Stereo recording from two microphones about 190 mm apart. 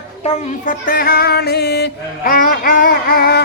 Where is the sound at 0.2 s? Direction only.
45° left (ahead or behind).